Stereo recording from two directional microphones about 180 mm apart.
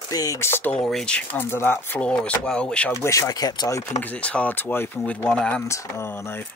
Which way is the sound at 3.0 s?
20° left (ahead or behind).